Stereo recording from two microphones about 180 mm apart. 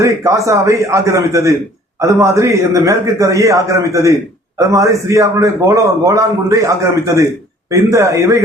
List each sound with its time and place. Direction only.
0.0 s a man's voice: 15° right (ahead or behind)